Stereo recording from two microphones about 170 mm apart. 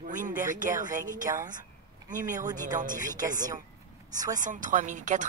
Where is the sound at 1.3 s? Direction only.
20° right (ahead or behind).